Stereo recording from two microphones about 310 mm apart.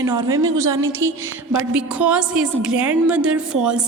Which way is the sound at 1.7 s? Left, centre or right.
Centre.